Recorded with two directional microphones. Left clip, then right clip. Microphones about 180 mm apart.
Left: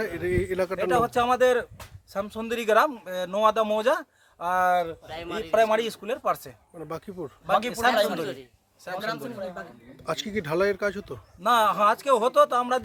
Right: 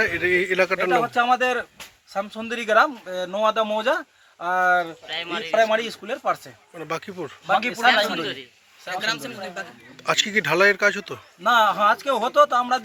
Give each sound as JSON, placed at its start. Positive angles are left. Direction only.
{"t": 0.0, "sound": "a man's voice", "side_deg": 5}
{"t": 0.9, "sound": "speech", "side_deg": 30}
{"t": 6.7, "sound": "a man's voice", "side_deg": 5}
{"t": 7.7, "sound": "a man's voice", "side_deg": 30}
{"t": 9.0, "sound": "speech", "side_deg": 60}
{"t": 10.0, "sound": "a man's voice", "side_deg": 5}
{"t": 11.4, "sound": "speech", "side_deg": 30}